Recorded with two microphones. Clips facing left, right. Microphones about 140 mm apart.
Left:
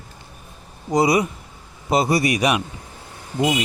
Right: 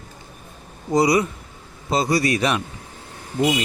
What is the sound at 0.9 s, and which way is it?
Speech, 20° left (ahead or behind).